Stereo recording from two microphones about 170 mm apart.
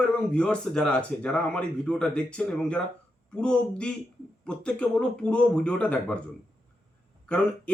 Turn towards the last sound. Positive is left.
turn(degrees=5)  # may be behind; listen again after turning